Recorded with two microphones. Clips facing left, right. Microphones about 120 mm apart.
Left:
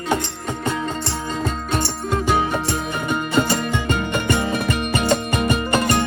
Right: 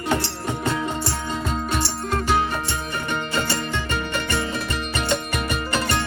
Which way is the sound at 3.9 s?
20° left (ahead or behind).